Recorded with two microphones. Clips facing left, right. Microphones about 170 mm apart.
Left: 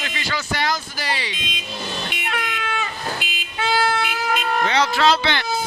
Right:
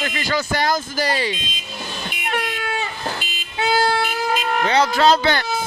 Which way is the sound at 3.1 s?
55° left (ahead or behind).